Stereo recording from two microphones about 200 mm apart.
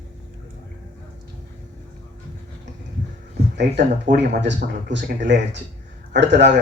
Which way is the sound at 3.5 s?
60° right (ahead or behind).